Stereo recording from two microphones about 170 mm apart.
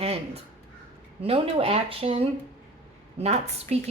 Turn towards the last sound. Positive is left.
turn(degrees=-40)  # may be behind; listen again after turning